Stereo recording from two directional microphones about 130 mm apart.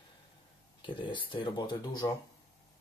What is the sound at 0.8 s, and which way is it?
Speech, 40° left (ahead or behind).